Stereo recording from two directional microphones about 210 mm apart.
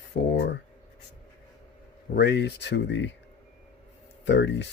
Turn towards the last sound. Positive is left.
turn(degrees=55)  # may be behind; listen again after turning